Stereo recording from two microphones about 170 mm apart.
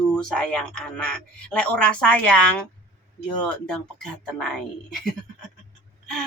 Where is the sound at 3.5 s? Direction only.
5° left (ahead or behind).